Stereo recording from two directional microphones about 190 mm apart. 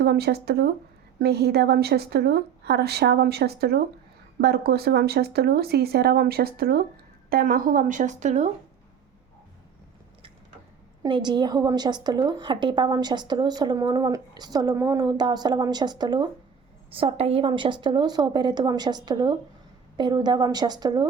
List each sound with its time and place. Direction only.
0.0 s speech: 60° right (ahead or behind); by 8.4 s 40° right (ahead or behind)
11.0 s a woman's voice: 25° right (ahead or behind)